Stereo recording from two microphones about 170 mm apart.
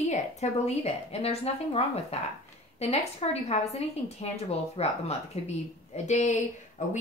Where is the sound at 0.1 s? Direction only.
40° left (ahead or behind).